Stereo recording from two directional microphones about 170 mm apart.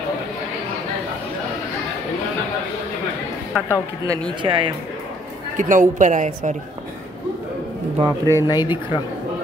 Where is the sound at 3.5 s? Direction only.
5° right (ahead or behind).